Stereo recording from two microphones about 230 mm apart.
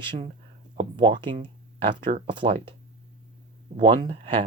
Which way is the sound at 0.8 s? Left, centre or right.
Right.